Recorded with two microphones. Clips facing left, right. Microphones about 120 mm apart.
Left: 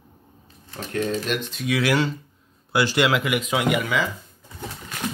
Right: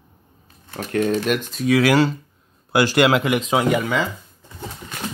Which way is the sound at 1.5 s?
40° right (ahead or behind).